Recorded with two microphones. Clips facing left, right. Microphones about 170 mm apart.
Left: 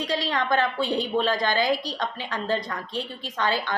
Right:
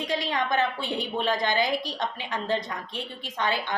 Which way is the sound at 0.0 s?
20° right (ahead or behind).